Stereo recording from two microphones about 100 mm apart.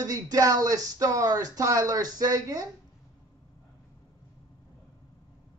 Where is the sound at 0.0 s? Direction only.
40° right (ahead or behind).